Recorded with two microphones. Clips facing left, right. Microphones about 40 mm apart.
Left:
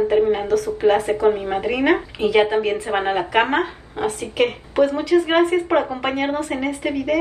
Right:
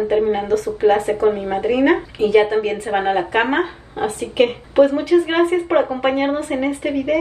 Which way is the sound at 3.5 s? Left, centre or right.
Right.